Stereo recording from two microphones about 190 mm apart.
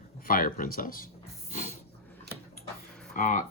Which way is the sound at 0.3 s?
50° left (ahead or behind).